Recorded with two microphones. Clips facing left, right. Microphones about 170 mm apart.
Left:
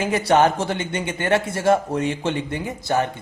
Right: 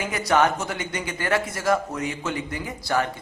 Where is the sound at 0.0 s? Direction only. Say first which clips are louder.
Left 4 dB; 30° left (ahead or behind).